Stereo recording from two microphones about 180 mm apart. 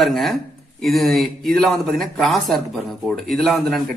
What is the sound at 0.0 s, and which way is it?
A man's voice, centre (ahead or behind).